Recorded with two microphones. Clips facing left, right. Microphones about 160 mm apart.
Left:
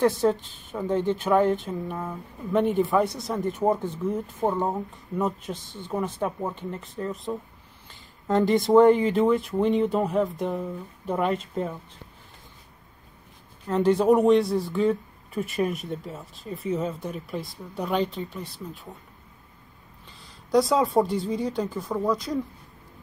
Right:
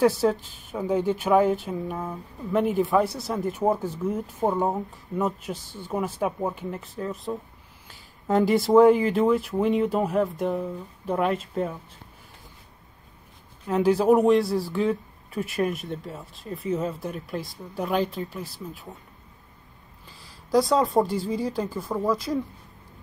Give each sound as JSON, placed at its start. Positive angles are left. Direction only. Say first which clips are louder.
{"t": 0.0, "sound": "speech", "louder": "right 1 dB", "side_deg": -5}
{"t": 13.7, "sound": "speech", "louder": "even", "side_deg": -5}
{"t": 20.1, "sound": "speech", "louder": "even", "side_deg": -5}